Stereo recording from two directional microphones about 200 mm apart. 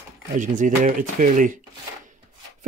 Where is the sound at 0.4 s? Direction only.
40° right (ahead or behind).